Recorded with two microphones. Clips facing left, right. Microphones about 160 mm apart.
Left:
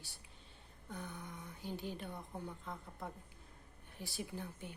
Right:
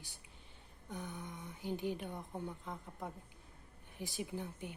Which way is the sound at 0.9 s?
15° right (ahead or behind).